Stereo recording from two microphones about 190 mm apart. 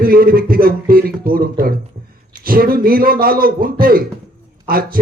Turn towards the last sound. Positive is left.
turn(degrees=-50)  # may be behind; listen again after turning